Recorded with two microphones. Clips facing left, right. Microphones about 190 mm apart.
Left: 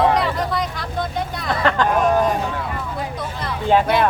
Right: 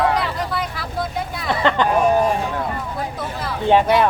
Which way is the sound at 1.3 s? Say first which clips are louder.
Right 4 dB; 5° right (ahead or behind).